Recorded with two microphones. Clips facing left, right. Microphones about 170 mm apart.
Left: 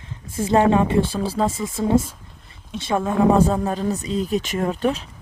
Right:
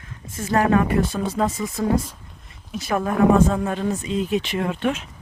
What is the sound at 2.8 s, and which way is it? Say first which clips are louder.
Speech: even; 25° left (ahead or behind).